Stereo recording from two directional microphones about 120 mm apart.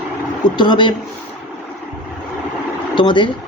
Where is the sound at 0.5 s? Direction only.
40° left (ahead or behind).